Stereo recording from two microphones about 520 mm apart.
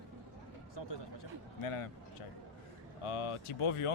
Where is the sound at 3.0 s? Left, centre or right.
Left.